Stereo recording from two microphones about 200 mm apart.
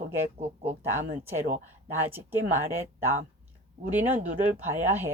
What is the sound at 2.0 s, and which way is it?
Speech, 10° right (ahead or behind).